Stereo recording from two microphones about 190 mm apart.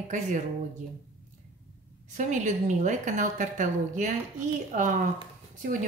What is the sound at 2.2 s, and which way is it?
A woman's voice, 40° right (ahead or behind).